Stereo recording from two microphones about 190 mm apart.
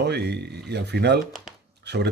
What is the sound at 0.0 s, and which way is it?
Speech, 60° right (ahead or behind).